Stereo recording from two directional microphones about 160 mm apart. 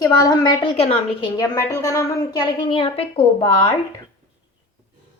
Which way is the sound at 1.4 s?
20° left (ahead or behind).